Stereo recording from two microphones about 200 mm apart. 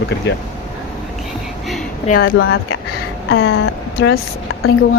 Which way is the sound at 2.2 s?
90° left.